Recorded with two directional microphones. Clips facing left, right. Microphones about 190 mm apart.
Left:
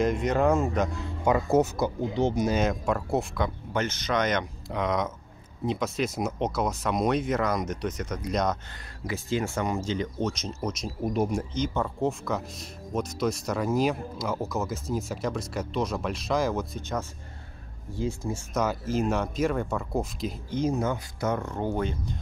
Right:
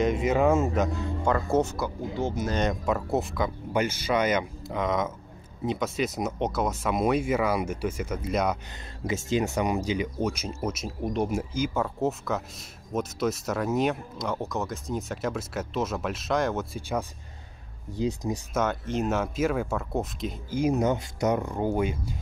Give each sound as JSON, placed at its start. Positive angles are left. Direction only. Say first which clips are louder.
{"t": 0.0, "sound": "speech", "louder": "right 1 dB", "side_deg": -5}
{"t": 1.2, "sound": "speech", "louder": "left 2 dB", "side_deg": 10}
{"t": 2.6, "sound": "speech", "louder": "even", "side_deg": 0}
{"t": 9.0, "sound": "speech", "louder": "right 2 dB", "side_deg": -20}
{"t": 17.9, "sound": "speech", "louder": "right 2 dB", "side_deg": -20}
{"t": 18.5, "sound": "speech", "louder": "left 1 dB", "side_deg": 0}
{"t": 20.7, "sound": "speech", "louder": "right 3 dB", "side_deg": -20}